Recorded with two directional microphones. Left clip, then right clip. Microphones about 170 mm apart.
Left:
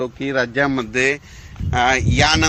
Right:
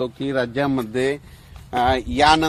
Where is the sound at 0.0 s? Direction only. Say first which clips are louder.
Left 2 dB; 10° right (ahead or behind).